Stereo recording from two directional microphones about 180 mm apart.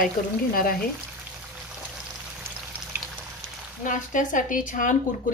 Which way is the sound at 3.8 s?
45° left (ahead or behind).